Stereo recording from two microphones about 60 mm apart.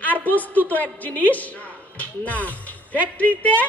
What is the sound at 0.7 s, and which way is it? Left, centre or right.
Speech, left.